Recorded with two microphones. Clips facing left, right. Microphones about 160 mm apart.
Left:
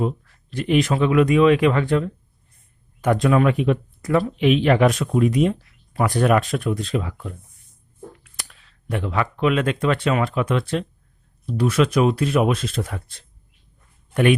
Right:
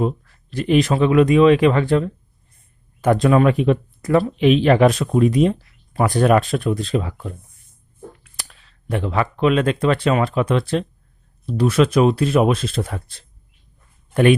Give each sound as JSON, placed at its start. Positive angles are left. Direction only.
{"t": 0.5, "sound": "speech", "side_deg": -35}
{"t": 8.4, "sound": "speech", "side_deg": -35}